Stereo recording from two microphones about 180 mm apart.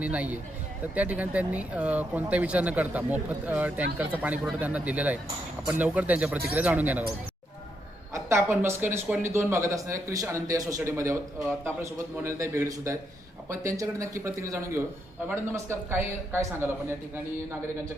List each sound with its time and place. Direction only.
0.0 s speech: 10° right (ahead or behind)
8.1 s speech: 15° right (ahead or behind)